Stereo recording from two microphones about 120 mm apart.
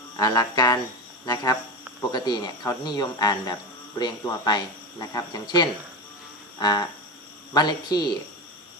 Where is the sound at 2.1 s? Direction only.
35° left (ahead or behind).